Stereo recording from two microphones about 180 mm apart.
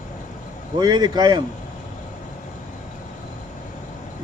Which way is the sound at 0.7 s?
25° right (ahead or behind).